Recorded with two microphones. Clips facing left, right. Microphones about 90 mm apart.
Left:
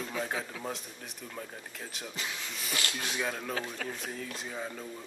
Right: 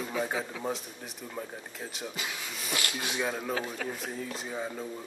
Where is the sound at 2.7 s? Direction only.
15° right (ahead or behind).